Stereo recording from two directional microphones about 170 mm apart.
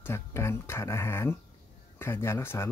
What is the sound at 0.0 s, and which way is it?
Speech, 15° left (ahead or behind).